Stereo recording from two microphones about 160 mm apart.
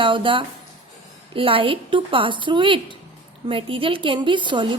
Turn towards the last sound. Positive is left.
turn(degrees=-30)  # may be behind; listen again after turning